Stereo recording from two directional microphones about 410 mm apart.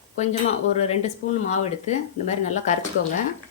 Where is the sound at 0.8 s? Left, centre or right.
Centre.